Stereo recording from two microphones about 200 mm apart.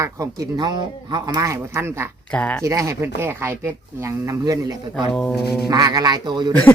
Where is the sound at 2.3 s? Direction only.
5° left (ahead or behind).